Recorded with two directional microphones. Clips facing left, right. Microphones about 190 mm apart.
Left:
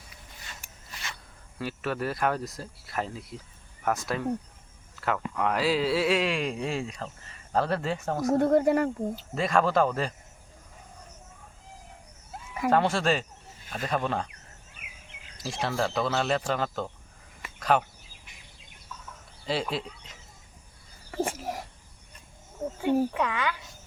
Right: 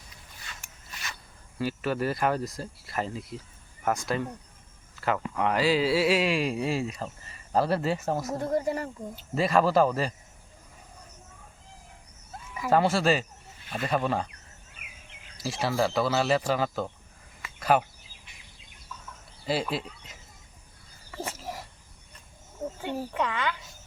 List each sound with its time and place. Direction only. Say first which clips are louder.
1.5 s speech: right 3 dB; centre (ahead or behind)
8.3 s speech: left 10 dB; 60° left (ahead or behind)
9.3 s speech: right 2 dB; 5° right (ahead or behind)
12.7 s speech: right 2 dB; 5° right (ahead or behind)
15.4 s speech: right 2 dB; 5° right (ahead or behind)
19.5 s speech: right 1 dB; 5° right (ahead or behind)
21.1 s a sound: left 6 dB; 50° left (ahead or behind)
22.8 s a woman's voice: left 6 dB; 10° left (ahead or behind)